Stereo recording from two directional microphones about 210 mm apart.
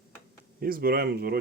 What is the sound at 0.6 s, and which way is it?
Speech, 45° right (ahead or behind).